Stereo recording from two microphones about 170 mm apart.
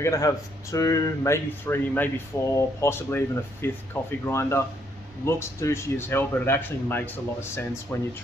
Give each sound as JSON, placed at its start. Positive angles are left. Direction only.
{"t": 0.0, "sound": "speech", "side_deg": 20}